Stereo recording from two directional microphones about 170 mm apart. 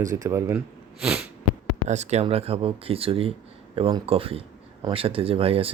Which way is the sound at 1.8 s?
40° right (ahead or behind).